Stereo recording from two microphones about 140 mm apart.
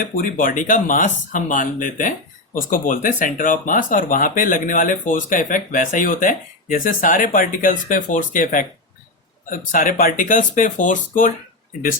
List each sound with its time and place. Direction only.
0.0 s speech: 80° left